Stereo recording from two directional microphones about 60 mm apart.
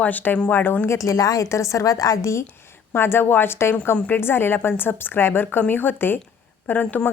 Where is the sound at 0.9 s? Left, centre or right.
Left.